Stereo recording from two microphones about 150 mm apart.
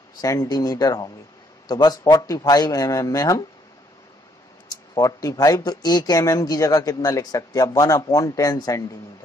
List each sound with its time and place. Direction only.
0.2 s speech: 25° left (ahead or behind)
4.6 s speech: 25° left (ahead or behind)